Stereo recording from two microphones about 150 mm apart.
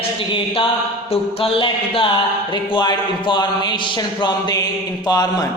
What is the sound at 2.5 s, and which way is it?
Speech, 30° left (ahead or behind).